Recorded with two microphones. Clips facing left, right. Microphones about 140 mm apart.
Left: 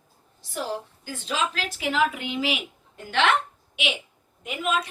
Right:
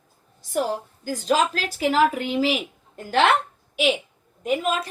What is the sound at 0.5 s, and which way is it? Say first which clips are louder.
A woman's voice: right 6 dB; 40° right (ahead or behind).